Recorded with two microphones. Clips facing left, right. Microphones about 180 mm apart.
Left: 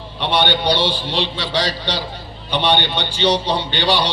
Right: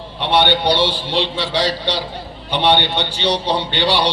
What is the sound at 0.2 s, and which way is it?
A man's voice, 60° right (ahead or behind).